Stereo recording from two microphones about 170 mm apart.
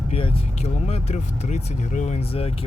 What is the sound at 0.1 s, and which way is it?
Speech, 40° left (ahead or behind).